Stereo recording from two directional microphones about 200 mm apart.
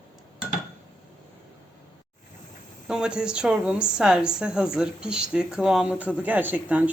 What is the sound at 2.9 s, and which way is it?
A woman's voice, 5° right (ahead or behind).